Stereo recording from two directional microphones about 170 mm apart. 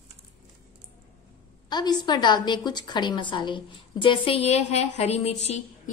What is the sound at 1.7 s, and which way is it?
A woman's voice, 25° left (ahead or behind).